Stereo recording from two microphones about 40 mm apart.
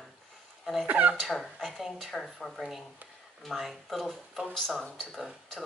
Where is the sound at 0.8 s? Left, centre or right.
Right.